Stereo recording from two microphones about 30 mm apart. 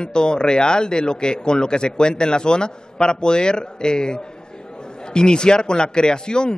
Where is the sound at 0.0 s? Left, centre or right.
Left.